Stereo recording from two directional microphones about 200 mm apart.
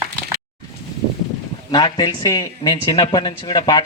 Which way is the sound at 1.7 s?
20° left (ahead or behind).